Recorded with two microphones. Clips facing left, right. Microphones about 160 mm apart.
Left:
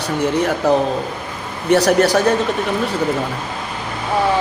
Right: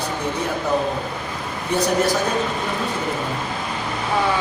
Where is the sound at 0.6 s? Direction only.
75° left (ahead or behind).